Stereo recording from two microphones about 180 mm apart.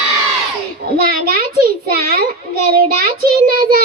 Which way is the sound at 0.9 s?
55° right (ahead or behind).